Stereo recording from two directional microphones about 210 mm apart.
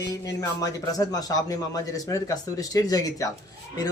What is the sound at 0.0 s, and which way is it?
A man's voice, 15° left (ahead or behind).